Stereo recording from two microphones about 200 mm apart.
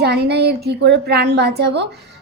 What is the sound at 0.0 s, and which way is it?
A woman's voice, 55° right (ahead or behind).